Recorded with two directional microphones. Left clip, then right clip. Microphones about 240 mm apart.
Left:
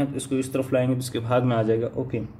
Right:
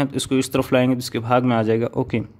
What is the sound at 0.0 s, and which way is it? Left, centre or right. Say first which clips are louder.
Speech: right 5 dB; right.